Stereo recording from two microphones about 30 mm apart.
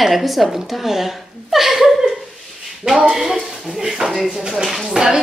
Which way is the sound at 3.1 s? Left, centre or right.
Centre.